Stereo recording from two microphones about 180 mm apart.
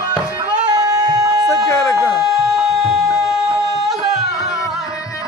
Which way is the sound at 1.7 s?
15° left (ahead or behind).